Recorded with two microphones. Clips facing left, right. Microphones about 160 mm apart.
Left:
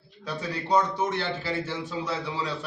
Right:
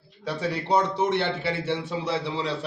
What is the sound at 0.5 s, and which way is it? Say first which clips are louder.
Speech: even; 30° right (ahead or behind).